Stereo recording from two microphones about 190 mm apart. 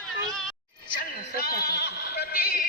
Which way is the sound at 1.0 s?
55° left (ahead or behind).